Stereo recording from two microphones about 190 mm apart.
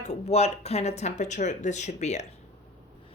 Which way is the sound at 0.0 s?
35° left (ahead or behind).